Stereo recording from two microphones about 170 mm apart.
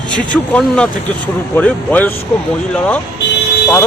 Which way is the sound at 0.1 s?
5° left (ahead or behind).